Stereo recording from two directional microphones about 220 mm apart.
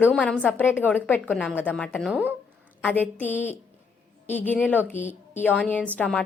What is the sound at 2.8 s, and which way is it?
A woman's voice, 5° left (ahead or behind).